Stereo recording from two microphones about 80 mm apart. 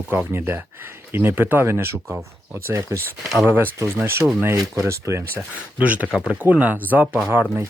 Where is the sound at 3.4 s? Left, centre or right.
Right.